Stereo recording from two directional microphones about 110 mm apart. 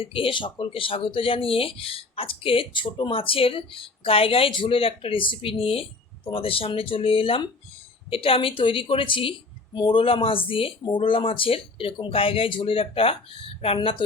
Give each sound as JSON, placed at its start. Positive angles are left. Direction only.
{"t": 0.0, "sound": "a woman's voice", "side_deg": 55}
{"t": 13.7, "sound": "a woman's voice", "side_deg": 45}